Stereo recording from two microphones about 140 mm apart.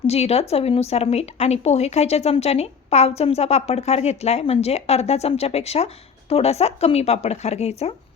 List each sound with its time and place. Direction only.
0.1 s a woman's voice: 50° left (ahead or behind)